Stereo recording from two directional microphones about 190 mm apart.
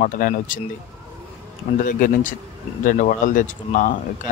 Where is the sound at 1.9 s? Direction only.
45° left (ahead or behind).